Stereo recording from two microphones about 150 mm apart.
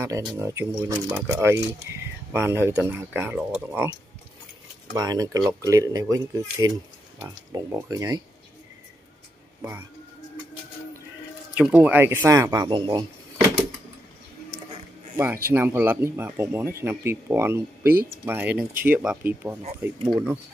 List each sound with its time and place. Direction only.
0.0 s speech: 20° right (ahead or behind)
4.9 s speech: 25° right (ahead or behind)
9.6 s speech: 15° right (ahead or behind)
11.5 s speech: 5° right (ahead or behind); by 13.0 s 30° right (ahead or behind)
15.1 s speech: 15° right (ahead or behind)